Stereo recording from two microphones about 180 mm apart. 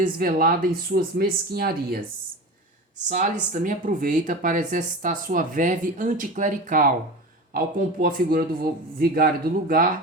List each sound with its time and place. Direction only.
0.0 s speech: 55° right (ahead or behind)
3.1 s speech: 45° right (ahead or behind)